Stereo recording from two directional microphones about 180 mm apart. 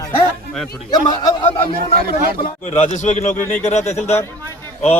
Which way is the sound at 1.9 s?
55° right (ahead or behind).